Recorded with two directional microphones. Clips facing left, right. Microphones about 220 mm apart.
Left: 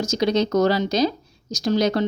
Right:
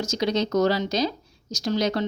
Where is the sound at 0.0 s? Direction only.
40° left (ahead or behind).